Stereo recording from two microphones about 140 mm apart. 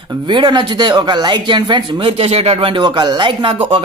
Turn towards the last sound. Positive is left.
turn(degrees=-35)  # may be behind; listen again after turning